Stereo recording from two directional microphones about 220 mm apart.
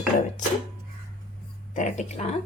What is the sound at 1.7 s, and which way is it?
Speech, 35° left (ahead or behind).